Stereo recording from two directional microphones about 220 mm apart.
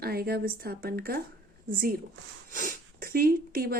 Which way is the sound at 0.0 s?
45° right (ahead or behind).